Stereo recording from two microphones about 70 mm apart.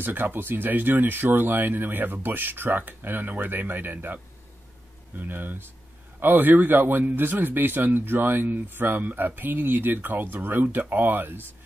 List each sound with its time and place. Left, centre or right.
0.0 s a man's voice: right